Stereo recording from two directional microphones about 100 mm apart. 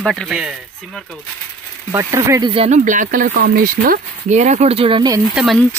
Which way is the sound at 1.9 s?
30° right (ahead or behind).